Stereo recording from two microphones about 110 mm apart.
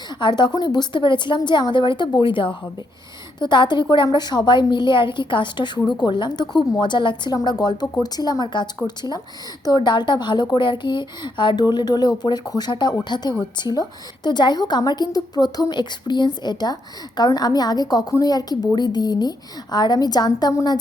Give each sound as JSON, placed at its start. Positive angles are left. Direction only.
{"t": 0.1, "sound": "a woman's voice", "side_deg": 40}